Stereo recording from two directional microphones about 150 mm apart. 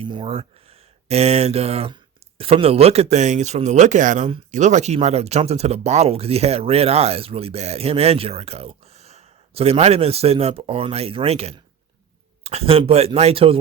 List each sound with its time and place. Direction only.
0.0 s speech: 35° right (ahead or behind)